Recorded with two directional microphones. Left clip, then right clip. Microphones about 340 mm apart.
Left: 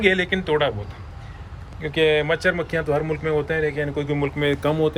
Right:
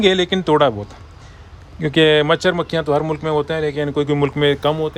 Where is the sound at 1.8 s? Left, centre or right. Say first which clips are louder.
Right 6 dB; right.